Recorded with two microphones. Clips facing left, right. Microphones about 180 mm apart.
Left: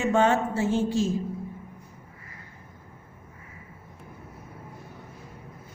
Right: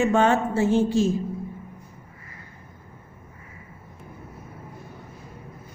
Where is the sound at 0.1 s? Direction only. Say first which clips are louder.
Right 2 dB; 60° right (ahead or behind).